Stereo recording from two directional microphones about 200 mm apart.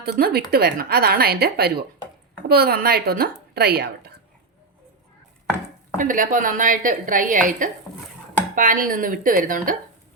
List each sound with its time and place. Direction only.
0.0 s a woman's voice: 50° right (ahead or behind)
6.0 s a woman's voice: 40° right (ahead or behind)